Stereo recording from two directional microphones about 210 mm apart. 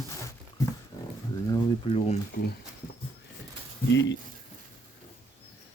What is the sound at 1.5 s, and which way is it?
Speech, 25° left (ahead or behind).